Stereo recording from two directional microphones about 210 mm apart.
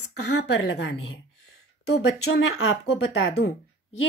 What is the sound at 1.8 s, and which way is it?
Speech, 75° left (ahead or behind).